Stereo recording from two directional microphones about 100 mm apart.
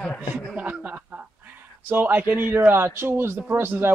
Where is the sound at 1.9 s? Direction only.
20° right (ahead or behind).